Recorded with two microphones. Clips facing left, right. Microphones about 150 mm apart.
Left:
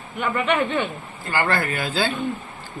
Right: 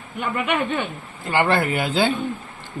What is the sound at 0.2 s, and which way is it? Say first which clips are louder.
Speech: left 1 dB; 10° right (ahead or behind).